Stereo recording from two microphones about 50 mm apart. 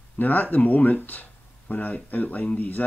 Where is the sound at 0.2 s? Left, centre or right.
Left.